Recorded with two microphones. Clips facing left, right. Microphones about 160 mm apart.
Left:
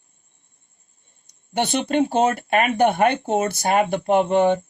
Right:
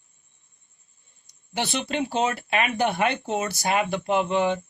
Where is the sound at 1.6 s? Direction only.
50° left (ahead or behind).